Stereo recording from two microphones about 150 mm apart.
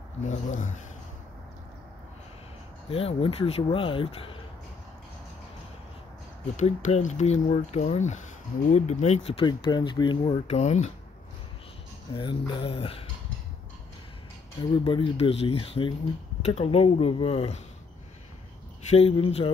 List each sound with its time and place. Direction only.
0.3 s speech: 55° left (ahead or behind)
2.9 s speech: 40° left (ahead or behind)
6.5 s speech: 50° left (ahead or behind)
9.5 s speech: 30° left (ahead or behind); by 10.9 s 50° left (ahead or behind)
12.1 s speech: 35° left (ahead or behind)
14.6 s speech: 35° left (ahead or behind)
18.9 s speech: 40° left (ahead or behind)